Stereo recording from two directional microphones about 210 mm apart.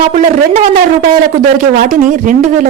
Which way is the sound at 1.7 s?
40° right (ahead or behind).